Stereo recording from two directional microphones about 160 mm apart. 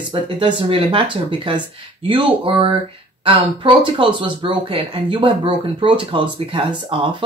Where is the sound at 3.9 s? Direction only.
35° right (ahead or behind).